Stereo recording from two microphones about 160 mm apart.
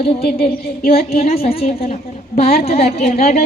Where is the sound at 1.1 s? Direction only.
40° left (ahead or behind).